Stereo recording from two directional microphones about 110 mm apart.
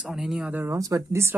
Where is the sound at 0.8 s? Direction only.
30° right (ahead or behind).